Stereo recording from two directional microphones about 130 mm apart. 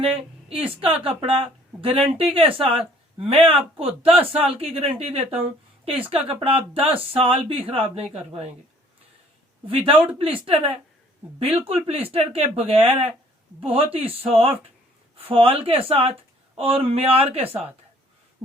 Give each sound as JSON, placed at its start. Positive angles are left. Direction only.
{"t": 0.4, "sound": "a woman's voice", "side_deg": -45}
{"t": 9.6, "sound": "a woman's voice", "side_deg": -45}
{"t": 9.9, "sound": "speech", "side_deg": -15}
{"t": 10.2, "sound": "a woman's voice", "side_deg": -45}